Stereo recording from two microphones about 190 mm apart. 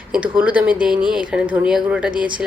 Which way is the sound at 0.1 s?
5° right (ahead or behind).